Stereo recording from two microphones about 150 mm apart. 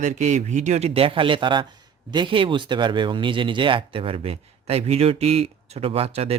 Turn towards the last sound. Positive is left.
turn(degrees=-40)  # may be behind; listen again after turning